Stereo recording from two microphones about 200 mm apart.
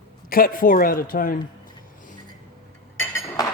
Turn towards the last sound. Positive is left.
turn(degrees=15)  # may be behind; listen again after turning